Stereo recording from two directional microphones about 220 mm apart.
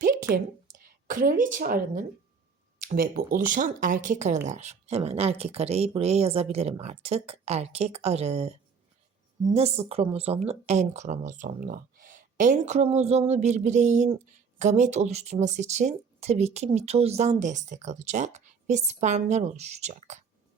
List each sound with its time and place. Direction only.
0.3 s a woman's voice: 10° right (ahead or behind)
0.7 s speech: 40° right (ahead or behind)